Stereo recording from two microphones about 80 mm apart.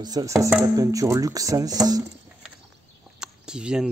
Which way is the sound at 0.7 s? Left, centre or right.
Right.